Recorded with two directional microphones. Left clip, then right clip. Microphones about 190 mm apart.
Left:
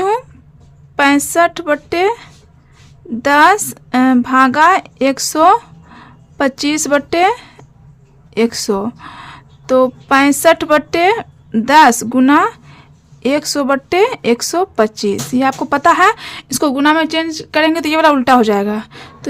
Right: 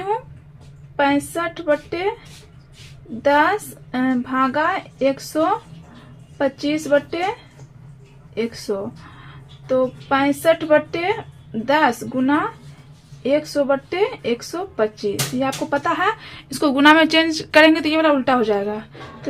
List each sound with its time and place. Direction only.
0.9 s speech: 50° left (ahead or behind)
8.4 s speech: 50° left (ahead or behind)
16.7 s speech: 20° left (ahead or behind)
17.8 s speech: 40° left (ahead or behind)